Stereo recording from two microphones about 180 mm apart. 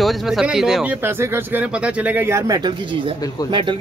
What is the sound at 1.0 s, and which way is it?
Speech, 10° right (ahead or behind).